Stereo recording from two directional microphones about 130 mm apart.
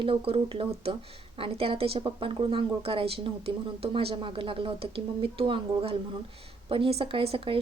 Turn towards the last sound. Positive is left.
turn(degrees=-45)  # may be behind; listen again after turning